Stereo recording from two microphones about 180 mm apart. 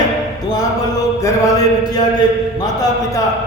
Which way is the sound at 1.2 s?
20° left (ahead or behind).